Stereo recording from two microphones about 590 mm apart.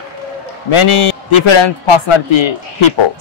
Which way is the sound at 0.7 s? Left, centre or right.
Left.